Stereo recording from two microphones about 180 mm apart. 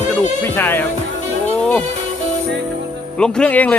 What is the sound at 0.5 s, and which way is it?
Speech, 10° left (ahead or behind).